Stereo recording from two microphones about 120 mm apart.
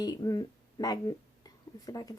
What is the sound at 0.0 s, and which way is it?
Speech, 35° left (ahead or behind).